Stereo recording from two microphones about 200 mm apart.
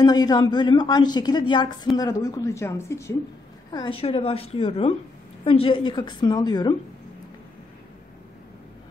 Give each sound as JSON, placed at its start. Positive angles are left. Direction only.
{"t": 0.0, "sound": "a woman's voice", "side_deg": 20}
{"t": 3.7, "sound": "a woman's voice", "side_deg": 25}